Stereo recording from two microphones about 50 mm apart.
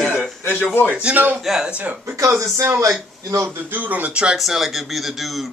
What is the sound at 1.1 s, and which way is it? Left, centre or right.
Speech, right.